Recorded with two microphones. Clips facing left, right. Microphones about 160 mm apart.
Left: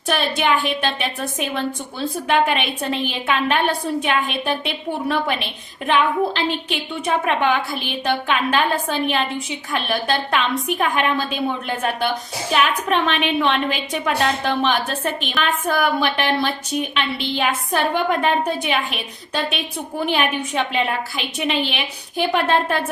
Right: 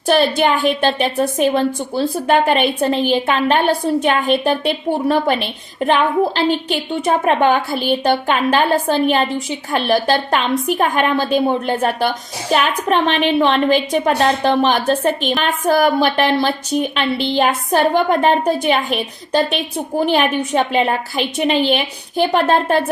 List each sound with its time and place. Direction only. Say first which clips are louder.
0.1 s a woman's voice: right 5 dB; 35° right (ahead or behind)